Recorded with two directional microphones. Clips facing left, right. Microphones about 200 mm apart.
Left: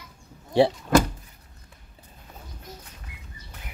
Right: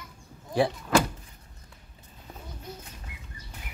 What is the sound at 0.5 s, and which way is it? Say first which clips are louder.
Speech: left 5 dB; 30° left (ahead or behind).